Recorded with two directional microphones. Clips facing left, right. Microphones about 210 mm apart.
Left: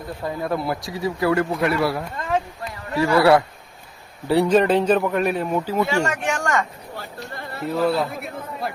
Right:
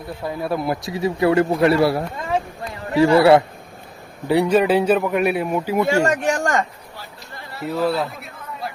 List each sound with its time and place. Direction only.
0.4 s speech: 15° right (ahead or behind)
4.3 s speech: 10° right (ahead or behind)
5.9 s speech: 40° right (ahead or behind)
6.9 s a sound: 55° left (ahead or behind)
7.6 s speech: centre (ahead or behind)